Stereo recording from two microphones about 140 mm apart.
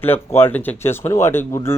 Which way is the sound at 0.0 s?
15° left (ahead or behind).